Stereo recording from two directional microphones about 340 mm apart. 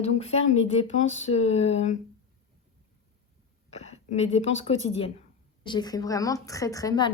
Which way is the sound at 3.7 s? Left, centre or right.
Centre.